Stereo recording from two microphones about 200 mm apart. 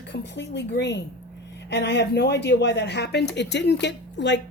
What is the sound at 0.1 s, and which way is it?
A woman's voice, 60° left (ahead or behind).